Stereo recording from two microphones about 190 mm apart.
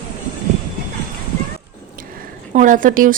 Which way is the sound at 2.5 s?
45° right (ahead or behind).